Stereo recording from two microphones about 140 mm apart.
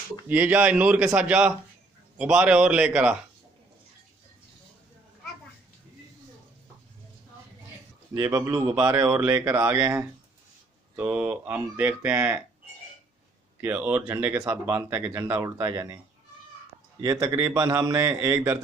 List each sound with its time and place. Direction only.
0.3 s speech: 10° right (ahead or behind)
8.1 s speech: 25° right (ahead or behind)
13.6 s speech: 15° right (ahead or behind)
17.0 s speech: 20° right (ahead or behind)